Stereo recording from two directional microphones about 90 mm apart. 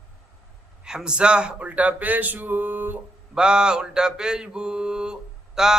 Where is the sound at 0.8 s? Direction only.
10° right (ahead or behind).